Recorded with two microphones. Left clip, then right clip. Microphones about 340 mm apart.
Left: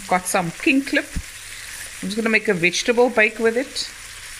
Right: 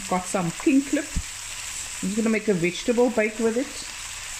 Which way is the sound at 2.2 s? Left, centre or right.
Left.